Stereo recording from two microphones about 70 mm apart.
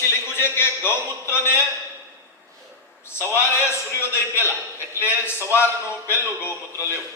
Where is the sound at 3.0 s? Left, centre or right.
Left.